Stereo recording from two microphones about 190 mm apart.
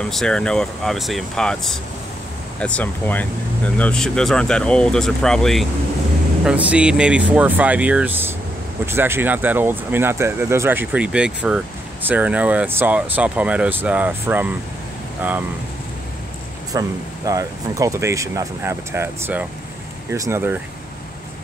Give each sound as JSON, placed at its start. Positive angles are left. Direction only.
{"t": 0.0, "sound": "speech", "side_deg": 5}
{"t": 16.7, "sound": "speech", "side_deg": -20}